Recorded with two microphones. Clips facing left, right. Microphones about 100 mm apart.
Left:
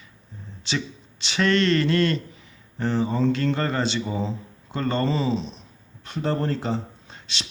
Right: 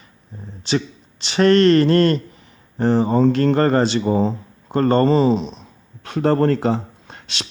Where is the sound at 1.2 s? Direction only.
40° right (ahead or behind).